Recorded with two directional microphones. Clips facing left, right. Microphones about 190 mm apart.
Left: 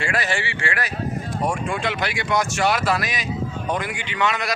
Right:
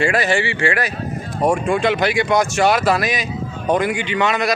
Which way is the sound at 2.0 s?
20° right (ahead or behind).